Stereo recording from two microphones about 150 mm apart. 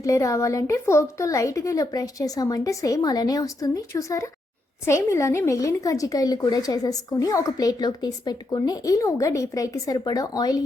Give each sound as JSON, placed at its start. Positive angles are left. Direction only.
{"t": 0.0, "sound": "speech", "side_deg": 20}